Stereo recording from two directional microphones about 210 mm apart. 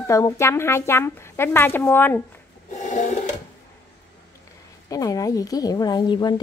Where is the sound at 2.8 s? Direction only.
35° left (ahead or behind).